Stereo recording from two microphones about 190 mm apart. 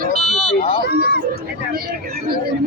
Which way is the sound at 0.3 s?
Centre (ahead or behind).